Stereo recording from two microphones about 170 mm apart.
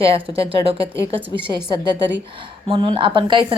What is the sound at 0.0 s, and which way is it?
A woman's voice, 35° right (ahead or behind).